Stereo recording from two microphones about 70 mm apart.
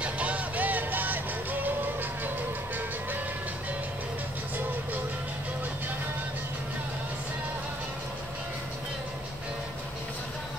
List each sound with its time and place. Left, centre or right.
0.0 s music: centre